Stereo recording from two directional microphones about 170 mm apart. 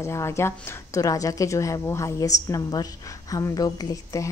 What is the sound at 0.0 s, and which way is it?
A woman's voice, 15° left (ahead or behind).